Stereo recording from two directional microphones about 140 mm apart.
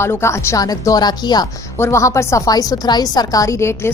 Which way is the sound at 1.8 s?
20° left (ahead or behind).